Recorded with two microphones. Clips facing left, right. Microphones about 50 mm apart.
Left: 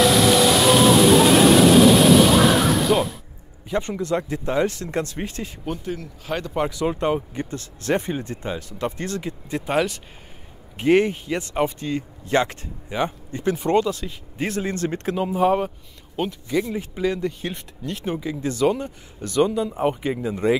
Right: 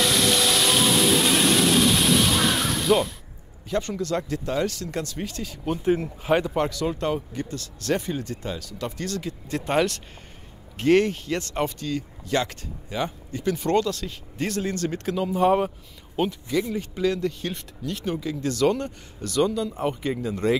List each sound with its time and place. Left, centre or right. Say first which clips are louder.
0.0 s a sound: left 6 dB; centre
3.7 s speech: left 2 dB; left
5.9 s speech: right 7 dB; right
6.7 s speech: left 3 dB; left
9.7 s speech: even; centre
11.9 s speech: left 4 dB; left
13.6 s speech: left 3 dB; centre
15.3 s speech: even; centre
16.5 s speech: left 3 dB; centre